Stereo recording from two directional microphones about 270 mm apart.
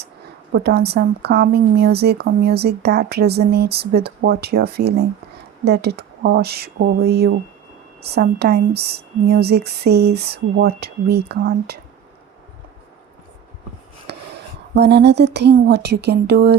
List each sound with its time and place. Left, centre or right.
0.5 s a woman's voice: right
14.1 s a sound: right
14.8 s a woman's voice: right